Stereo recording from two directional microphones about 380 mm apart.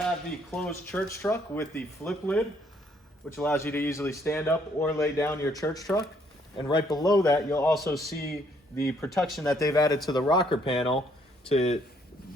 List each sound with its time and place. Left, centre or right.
0.5 s a man's voice: centre